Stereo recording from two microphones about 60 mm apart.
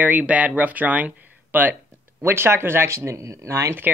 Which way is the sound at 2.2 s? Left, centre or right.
Right.